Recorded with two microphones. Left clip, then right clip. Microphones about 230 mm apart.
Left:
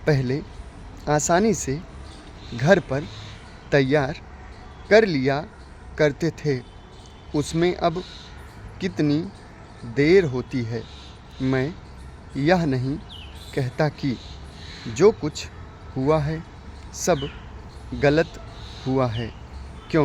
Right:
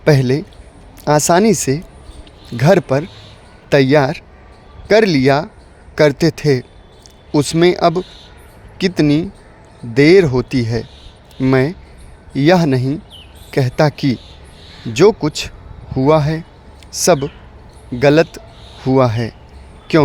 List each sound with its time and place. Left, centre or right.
0.0 s speech: right